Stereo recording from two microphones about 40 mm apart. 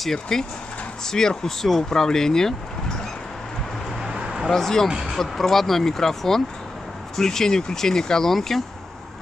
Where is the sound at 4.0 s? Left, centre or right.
Centre.